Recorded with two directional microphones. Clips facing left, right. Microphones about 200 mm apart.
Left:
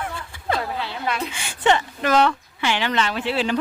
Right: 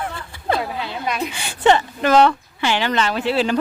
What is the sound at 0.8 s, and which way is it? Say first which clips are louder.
Speech: right 2 dB; 15° right (ahead or behind).